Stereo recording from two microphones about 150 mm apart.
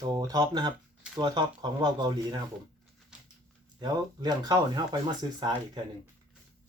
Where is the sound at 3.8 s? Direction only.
30° right (ahead or behind).